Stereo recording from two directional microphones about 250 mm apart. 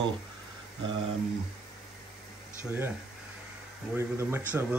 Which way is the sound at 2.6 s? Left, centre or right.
Centre.